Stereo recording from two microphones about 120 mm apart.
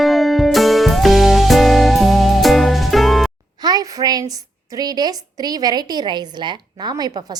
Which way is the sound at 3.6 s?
35° right (ahead or behind).